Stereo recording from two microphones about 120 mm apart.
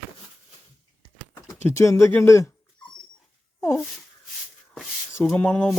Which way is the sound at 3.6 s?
25° left (ahead or behind).